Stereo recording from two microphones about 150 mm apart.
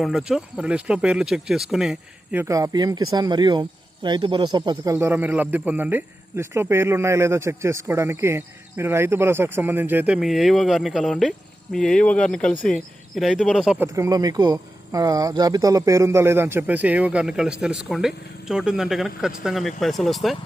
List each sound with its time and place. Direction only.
0.0 s speech: centre (ahead or behind)
2.4 s a man's voice: 20° right (ahead or behind); by 13.8 s 5° right (ahead or behind)
13.8 s a man's voice: 20° right (ahead or behind); by 20.3 s centre (ahead or behind)